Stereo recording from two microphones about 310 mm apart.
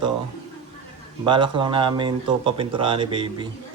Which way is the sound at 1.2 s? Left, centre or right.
Centre.